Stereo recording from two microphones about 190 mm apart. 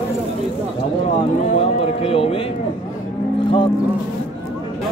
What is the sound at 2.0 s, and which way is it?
Speech, 30° left (ahead or behind).